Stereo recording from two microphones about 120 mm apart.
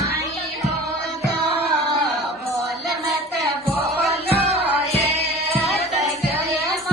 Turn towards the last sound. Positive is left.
turn(degrees=-65)  # may be behind; listen again after turning